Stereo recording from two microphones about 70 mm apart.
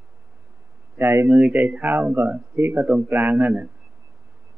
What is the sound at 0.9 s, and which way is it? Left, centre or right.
Speech, right.